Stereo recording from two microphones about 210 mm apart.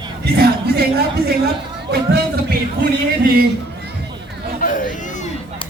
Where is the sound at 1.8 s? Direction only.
50° right (ahead or behind).